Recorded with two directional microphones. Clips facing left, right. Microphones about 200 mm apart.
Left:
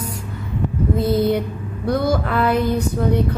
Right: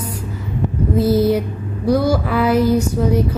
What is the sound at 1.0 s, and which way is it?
Music, 5° right (ahead or behind).